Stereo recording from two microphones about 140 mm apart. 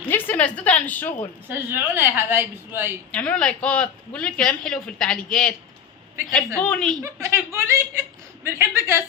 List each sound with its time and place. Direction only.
0.0 s a woman's voice: 15° left (ahead or behind)
1.5 s a woman's voice: 15° right (ahead or behind)
3.1 s speech: 10° left (ahead or behind)
6.6 s a woman's voice: 5° left (ahead or behind)
7.0 s a woman's voice: 20° right (ahead or behind)